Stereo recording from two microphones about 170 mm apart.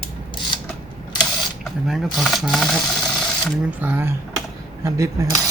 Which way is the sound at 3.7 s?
10° right (ahead or behind).